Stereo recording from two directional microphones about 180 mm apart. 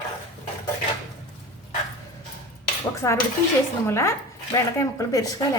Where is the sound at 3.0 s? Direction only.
15° left (ahead or behind).